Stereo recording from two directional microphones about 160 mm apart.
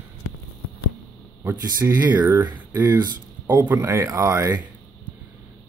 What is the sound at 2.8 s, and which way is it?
Speech, 25° right (ahead or behind).